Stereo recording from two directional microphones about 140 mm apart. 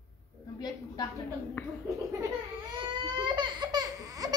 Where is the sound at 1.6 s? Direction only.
15° left (ahead or behind).